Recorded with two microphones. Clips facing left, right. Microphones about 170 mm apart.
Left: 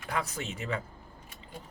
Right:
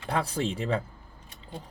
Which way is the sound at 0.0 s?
30° right (ahead or behind).